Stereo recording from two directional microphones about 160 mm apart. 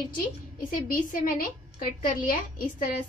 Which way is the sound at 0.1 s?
60° left (ahead or behind).